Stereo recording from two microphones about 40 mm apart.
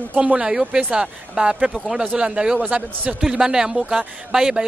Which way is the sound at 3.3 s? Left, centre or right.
Centre.